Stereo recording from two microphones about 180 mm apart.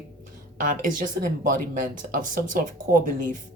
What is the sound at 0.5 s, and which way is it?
Speech, 45° right (ahead or behind).